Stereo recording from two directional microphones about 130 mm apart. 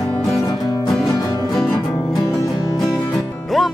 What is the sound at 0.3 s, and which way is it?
Music, 25° left (ahead or behind).